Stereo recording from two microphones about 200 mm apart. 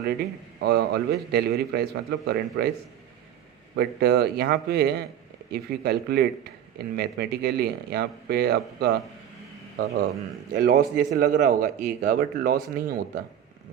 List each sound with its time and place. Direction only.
0.6 s a man's voice: 55° right (ahead or behind)
3.8 s a man's voice: 55° right (ahead or behind)